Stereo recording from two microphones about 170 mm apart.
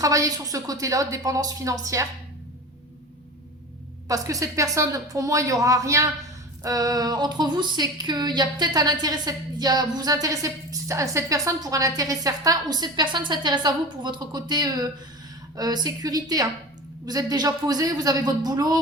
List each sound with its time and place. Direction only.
0.0 s speech: 20° right (ahead or behind)
4.1 s speech: 20° right (ahead or behind)